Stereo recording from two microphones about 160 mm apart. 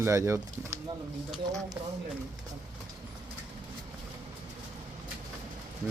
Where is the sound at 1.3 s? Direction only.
Centre (ahead or behind).